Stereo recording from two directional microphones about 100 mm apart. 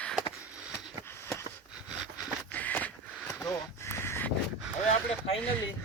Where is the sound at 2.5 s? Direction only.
15° left (ahead or behind).